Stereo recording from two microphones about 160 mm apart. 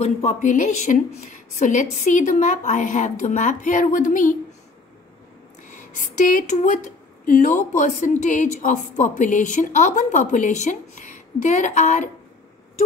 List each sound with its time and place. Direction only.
0.0 s speech: 45° left (ahead or behind)
5.7 s speech: 50° left (ahead or behind)